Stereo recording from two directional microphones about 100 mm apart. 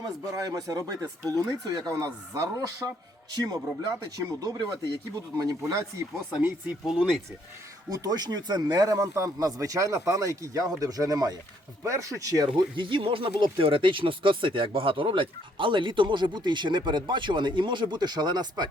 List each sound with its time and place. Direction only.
0.0 s speech: 35° right (ahead or behind)
6.8 s speech: 5° right (ahead or behind)
7.9 s speech: 40° right (ahead or behind)
12.5 s speech: 55° right (ahead or behind)